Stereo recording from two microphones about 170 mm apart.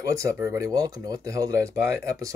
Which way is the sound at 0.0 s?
20° right (ahead or behind).